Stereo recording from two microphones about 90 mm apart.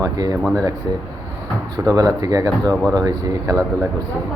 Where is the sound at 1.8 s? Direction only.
40° right (ahead or behind).